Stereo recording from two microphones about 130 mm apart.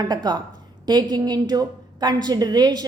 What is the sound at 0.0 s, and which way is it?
A woman's voice, 35° right (ahead or behind).